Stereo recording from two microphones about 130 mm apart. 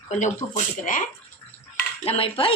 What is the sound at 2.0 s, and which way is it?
Dishes, 45° left (ahead or behind).